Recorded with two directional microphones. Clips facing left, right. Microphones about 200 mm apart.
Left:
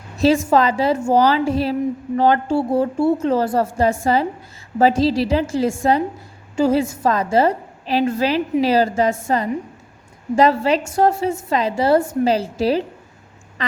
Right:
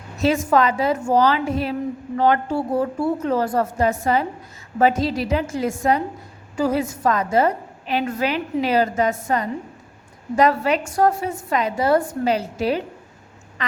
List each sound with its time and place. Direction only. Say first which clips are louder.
0.2 s a woman's voice: left 3 dB; 30° left (ahead or behind)
13.6 s duck: left 3 dB; 35° left (ahead or behind)